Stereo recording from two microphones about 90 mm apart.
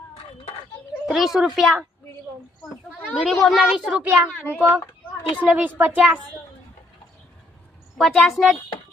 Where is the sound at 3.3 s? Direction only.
Centre (ahead or behind).